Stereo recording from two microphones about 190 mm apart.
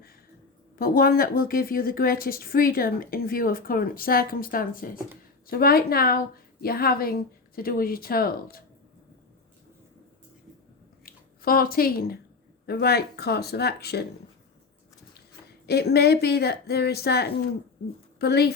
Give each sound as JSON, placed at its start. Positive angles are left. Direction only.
{"t": 0.8, "sound": "a woman's voice", "side_deg": 50}
{"t": 11.0, "sound": "speech", "side_deg": 50}
{"t": 15.6, "sound": "speech", "side_deg": 60}